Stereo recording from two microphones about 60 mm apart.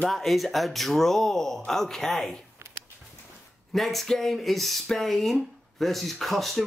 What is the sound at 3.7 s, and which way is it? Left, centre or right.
Speech, centre.